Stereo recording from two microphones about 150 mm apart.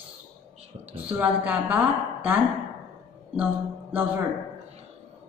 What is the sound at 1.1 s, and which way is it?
A woman's voice, 10° right (ahead or behind).